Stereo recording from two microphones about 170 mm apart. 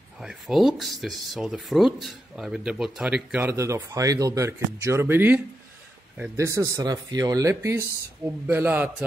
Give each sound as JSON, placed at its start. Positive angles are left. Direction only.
{"t": 0.2, "sound": "a man's voice", "side_deg": 0}